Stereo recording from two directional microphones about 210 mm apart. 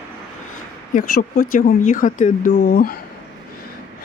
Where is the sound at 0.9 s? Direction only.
40° left (ahead or behind).